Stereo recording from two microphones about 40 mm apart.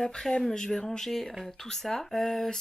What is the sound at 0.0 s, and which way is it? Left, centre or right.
Speech, centre.